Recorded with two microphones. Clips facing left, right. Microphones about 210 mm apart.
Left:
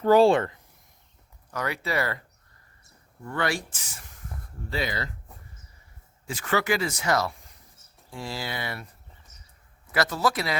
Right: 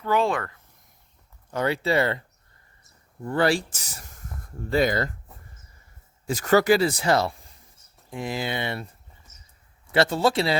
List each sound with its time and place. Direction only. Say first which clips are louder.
0.0 s speech: left 6 dB; 35° left (ahead or behind)
1.5 s speech: right 6 dB; 30° right (ahead or behind)
3.2 s speech: right 6 dB; 30° right (ahead or behind)
6.2 s speech: right 7 dB; 40° right (ahead or behind)
8.1 s speech: right 5 dB; 20° right (ahead or behind)
9.9 s speech: right 5 dB; 25° right (ahead or behind)